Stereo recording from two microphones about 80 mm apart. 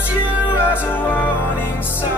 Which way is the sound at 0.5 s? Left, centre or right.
Left.